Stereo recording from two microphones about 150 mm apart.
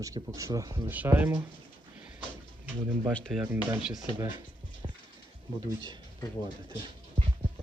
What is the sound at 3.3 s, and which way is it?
Speech, 5° right (ahead or behind).